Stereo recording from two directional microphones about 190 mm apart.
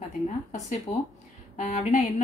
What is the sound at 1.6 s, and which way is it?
Speech, 35° left (ahead or behind).